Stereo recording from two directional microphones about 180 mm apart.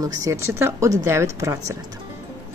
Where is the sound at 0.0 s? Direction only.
20° right (ahead or behind).